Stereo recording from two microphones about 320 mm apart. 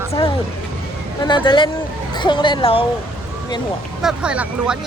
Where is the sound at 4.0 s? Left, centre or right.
Centre.